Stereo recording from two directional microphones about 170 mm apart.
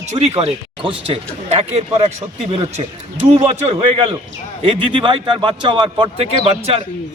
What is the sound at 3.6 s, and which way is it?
A man's voice, 30° right (ahead or behind).